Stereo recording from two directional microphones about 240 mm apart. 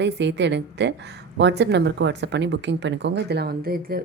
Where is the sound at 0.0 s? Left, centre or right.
Right.